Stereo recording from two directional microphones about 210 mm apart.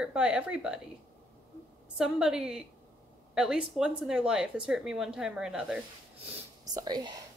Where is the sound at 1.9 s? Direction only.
5° right (ahead or behind).